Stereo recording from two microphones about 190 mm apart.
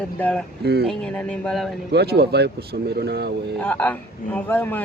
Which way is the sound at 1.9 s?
55° right (ahead or behind).